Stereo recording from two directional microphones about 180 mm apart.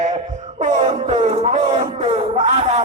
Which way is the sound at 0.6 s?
40° right (ahead or behind).